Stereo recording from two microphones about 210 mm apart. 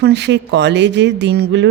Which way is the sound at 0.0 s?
55° right (ahead or behind).